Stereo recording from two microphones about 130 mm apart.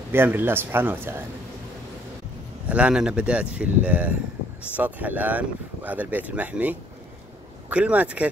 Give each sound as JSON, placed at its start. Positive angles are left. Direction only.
{"t": 0.1, "sound": "speech", "side_deg": -15}
{"t": 2.7, "sound": "speech", "side_deg": -5}